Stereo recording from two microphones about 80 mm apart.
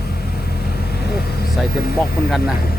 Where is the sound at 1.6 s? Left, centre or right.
Centre.